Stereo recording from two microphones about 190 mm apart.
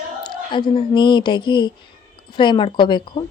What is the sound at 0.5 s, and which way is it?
A woman's voice, 25° left (ahead or behind).